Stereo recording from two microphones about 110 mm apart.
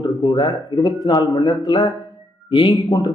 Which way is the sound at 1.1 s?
45° left (ahead or behind).